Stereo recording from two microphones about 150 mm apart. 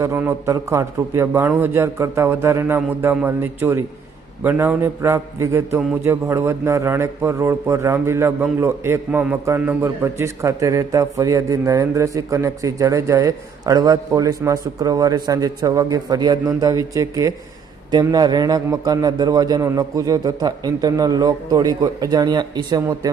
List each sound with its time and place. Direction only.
0.0 s a man's voice: 15° right (ahead or behind)